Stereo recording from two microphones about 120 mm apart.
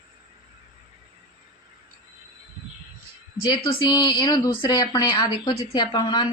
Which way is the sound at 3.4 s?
35° left (ahead or behind).